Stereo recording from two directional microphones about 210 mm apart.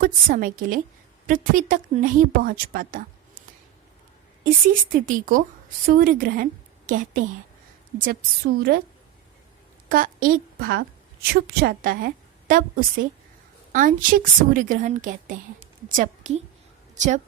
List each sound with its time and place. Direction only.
0.0 s a woman's voice: 45° right (ahead or behind)
4.4 s a woman's voice: 40° right (ahead or behind)
9.9 s a woman's voice: 40° right (ahead or behind)